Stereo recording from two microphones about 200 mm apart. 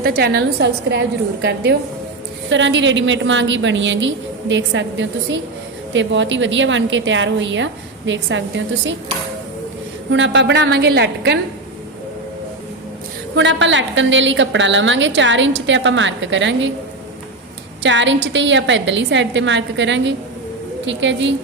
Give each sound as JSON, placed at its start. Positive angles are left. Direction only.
{"t": 0.0, "sound": "a woman's voice", "side_deg": -55}
{"t": 10.1, "sound": "a woman's voice", "side_deg": -65}
{"t": 13.3, "sound": "a woman's voice", "side_deg": -65}
{"t": 17.8, "sound": "a woman's voice", "side_deg": -65}